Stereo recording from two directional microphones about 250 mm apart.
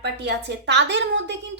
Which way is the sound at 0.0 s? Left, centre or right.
Right.